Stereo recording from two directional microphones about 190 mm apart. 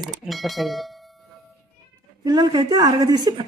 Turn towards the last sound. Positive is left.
turn(degrees=-20)  # may be behind; listen again after turning